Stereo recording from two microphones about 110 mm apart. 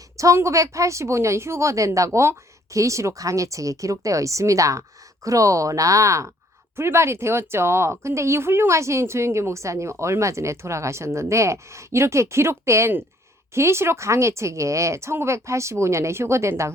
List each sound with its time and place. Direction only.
0.2 s speech: 25° right (ahead or behind)